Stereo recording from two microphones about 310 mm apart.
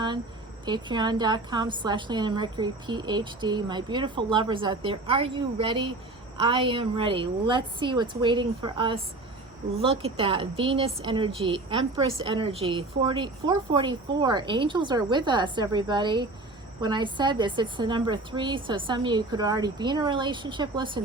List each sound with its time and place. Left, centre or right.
0.6 s a woman's voice: centre